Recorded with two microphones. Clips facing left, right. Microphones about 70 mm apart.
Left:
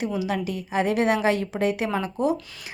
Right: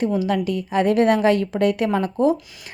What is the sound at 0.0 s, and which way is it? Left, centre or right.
A woman's voice, right.